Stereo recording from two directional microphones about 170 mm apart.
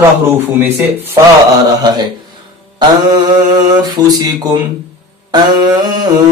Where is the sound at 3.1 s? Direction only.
25° right (ahead or behind).